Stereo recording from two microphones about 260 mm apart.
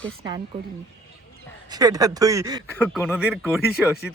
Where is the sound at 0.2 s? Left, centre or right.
Centre.